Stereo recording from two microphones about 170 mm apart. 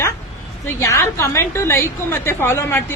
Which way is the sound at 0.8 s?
15° left (ahead or behind).